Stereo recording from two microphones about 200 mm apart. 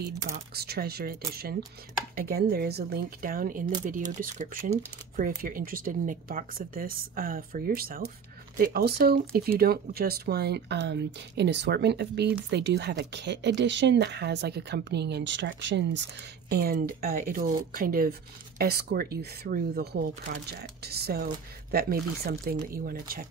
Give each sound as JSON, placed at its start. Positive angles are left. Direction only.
{"t": 0.6, "sound": "speech", "side_deg": -50}
{"t": 16.4, "sound": "speech", "side_deg": -50}